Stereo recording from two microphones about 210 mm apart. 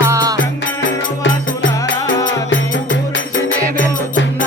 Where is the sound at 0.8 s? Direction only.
60° left (ahead or behind).